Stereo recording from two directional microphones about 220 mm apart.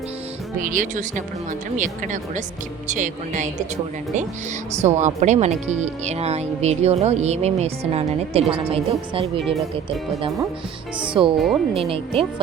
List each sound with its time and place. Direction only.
0.6 s speech: 35° right (ahead or behind)
4.8 s speech: 30° right (ahead or behind)
11.1 s speech: 25° right (ahead or behind)
11.3 s speech: centre (ahead or behind)
11.7 s speech: 25° right (ahead or behind)